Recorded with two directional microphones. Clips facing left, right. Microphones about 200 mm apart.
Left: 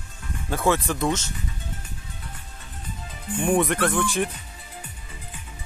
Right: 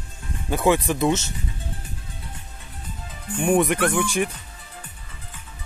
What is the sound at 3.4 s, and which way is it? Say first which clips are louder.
Speech: right 2 dB; 10° right (ahead or behind).